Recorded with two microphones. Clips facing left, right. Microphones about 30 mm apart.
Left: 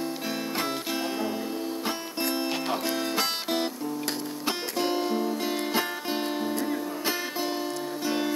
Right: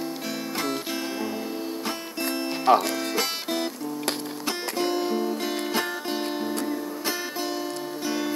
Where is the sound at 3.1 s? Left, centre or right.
Centre.